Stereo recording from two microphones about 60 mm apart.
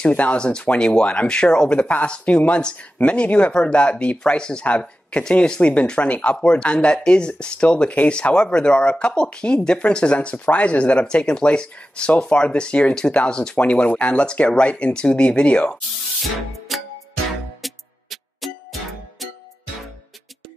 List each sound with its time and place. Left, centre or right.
0.0 s speech: left
16.2 s music: centre